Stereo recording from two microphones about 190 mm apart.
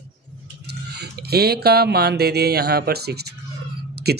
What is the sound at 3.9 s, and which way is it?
Whispering, 60° right (ahead or behind).